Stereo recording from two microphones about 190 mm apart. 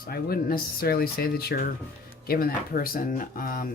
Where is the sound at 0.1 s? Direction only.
50° left (ahead or behind).